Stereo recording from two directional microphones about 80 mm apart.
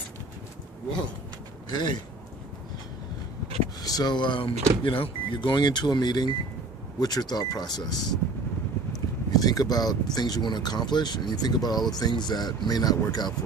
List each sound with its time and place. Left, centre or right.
1.7 s speech: left
3.8 s speech: left
9.3 s speech: left